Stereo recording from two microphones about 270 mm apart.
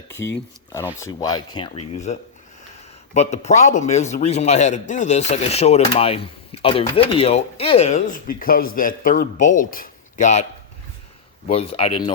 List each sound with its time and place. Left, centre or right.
1.2 s speech: centre
11.4 s speech: left